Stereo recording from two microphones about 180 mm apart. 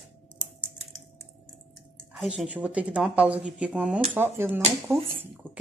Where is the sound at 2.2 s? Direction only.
Centre (ahead or behind).